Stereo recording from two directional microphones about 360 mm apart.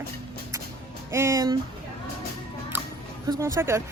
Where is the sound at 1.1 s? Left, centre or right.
Centre.